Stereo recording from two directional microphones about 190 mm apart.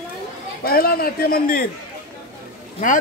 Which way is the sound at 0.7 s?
50° left (ahead or behind).